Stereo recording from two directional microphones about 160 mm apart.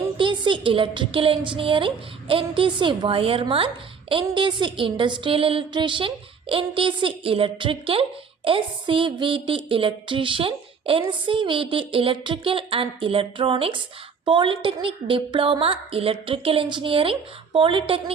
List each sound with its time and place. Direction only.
0.2 s speech: 30° right (ahead or behind)